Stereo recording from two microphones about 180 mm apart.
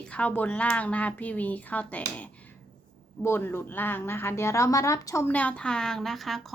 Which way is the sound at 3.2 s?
10° left (ahead or behind).